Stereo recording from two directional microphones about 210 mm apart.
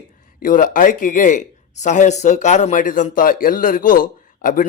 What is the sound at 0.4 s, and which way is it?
A man's voice, 40° left (ahead or behind).